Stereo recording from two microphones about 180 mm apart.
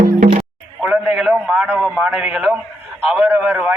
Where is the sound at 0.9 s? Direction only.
5° right (ahead or behind).